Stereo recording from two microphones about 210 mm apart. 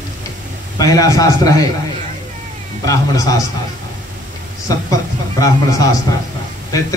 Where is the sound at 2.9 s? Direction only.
15° left (ahead or behind).